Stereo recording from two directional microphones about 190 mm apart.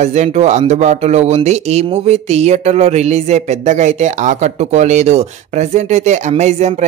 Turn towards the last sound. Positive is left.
turn(degrees=-35)  # may be behind; listen again after turning